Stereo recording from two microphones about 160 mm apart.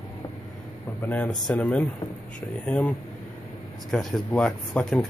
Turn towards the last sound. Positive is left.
turn(degrees=5)  # may be behind; listen again after turning